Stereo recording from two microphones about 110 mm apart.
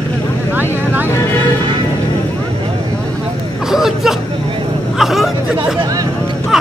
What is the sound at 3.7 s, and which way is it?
Hubbub, 5° right (ahead or behind).